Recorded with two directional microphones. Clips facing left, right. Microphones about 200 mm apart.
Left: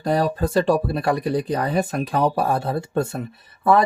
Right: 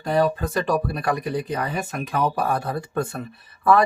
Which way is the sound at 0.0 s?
35° left (ahead or behind).